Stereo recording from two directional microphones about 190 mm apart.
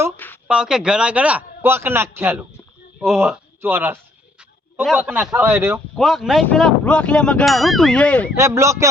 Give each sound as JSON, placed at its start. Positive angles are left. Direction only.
{"t": 0.4, "sound": "a man's voice", "side_deg": -5}
{"t": 3.1, "sound": "a man's voice", "side_deg": 0}
{"t": 6.0, "sound": "speech", "side_deg": 0}
{"t": 8.4, "sound": "a man's voice", "side_deg": -15}